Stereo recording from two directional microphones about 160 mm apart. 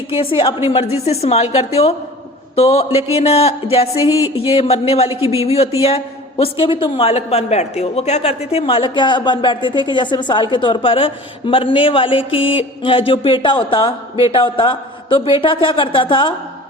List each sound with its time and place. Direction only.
0.1 s a woman's voice: 35° left (ahead or behind)